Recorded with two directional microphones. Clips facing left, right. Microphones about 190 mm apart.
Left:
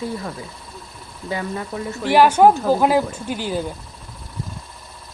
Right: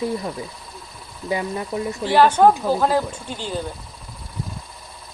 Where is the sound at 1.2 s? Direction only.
20° right (ahead or behind).